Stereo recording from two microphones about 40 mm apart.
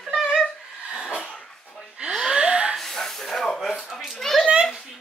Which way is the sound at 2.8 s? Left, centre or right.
Centre.